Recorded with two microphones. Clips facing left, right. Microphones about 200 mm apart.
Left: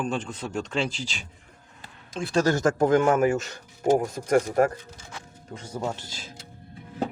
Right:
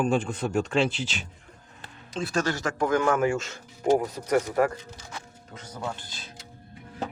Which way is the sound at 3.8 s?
45° left (ahead or behind).